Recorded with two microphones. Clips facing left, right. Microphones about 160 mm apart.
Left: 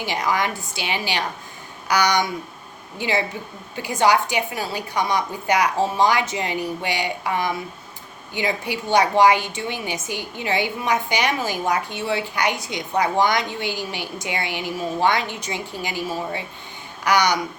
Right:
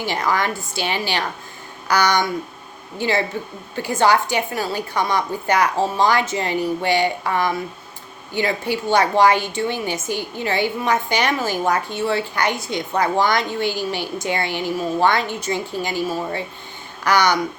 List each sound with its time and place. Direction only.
0.0 s a woman's voice: 15° left (ahead or behind)